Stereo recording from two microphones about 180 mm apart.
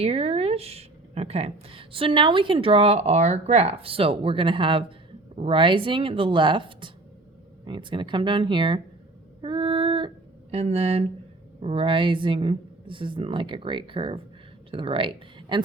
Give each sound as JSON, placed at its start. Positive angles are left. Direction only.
{"t": 0.0, "sound": "speech", "side_deg": -35}
{"t": 9.4, "sound": "a sound", "side_deg": -30}
{"t": 10.5, "sound": "speech", "side_deg": -35}